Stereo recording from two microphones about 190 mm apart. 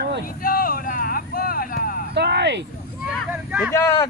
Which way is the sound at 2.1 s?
60° right (ahead or behind).